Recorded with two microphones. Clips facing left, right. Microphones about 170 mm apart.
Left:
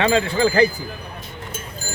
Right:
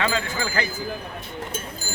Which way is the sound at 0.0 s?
25° left (ahead or behind).